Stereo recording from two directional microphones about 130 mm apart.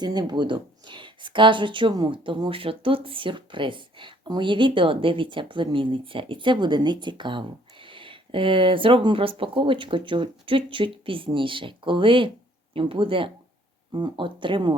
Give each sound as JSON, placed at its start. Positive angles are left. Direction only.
{"t": 0.0, "sound": "speech", "side_deg": -35}